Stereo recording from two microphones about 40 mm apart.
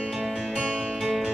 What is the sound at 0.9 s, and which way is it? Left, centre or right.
Music, centre.